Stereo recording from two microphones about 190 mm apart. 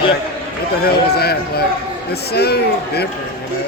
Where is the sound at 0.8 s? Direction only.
55° left (ahead or behind).